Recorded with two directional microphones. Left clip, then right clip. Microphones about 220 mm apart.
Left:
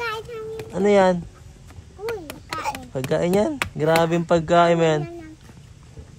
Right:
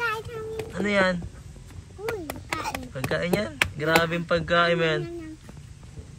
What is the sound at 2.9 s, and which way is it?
A man's voice, 30° left (ahead or behind).